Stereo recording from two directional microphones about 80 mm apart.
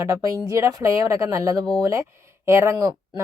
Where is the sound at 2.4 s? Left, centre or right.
Right.